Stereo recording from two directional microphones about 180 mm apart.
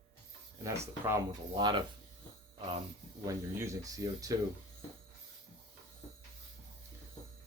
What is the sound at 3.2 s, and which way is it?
Speech, 15° right (ahead or behind).